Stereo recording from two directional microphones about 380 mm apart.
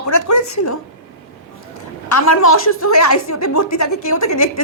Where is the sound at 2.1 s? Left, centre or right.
Left.